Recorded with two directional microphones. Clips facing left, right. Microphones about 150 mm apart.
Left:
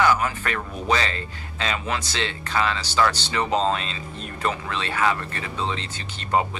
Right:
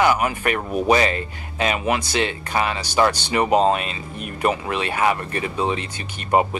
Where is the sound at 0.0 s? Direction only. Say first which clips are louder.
Right 3 dB; 15° right (ahead or behind).